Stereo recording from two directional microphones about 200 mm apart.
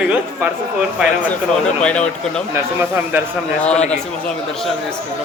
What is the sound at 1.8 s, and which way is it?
Speech, 5° left (ahead or behind).